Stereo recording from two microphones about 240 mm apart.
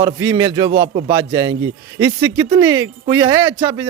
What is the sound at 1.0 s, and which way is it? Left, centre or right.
A man's voice, centre.